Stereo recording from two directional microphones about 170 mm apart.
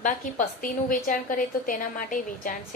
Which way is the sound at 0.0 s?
50° left (ahead or behind).